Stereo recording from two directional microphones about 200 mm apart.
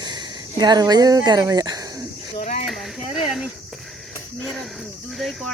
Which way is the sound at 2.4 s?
35° left (ahead or behind).